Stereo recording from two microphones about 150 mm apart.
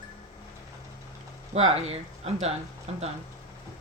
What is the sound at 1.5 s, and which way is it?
Speech, 45° right (ahead or behind).